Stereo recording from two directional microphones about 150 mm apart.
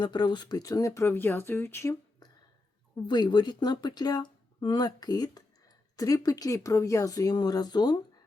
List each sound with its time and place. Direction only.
0.0 s speech: 30° left (ahead or behind)
2.9 s speech: 30° left (ahead or behind)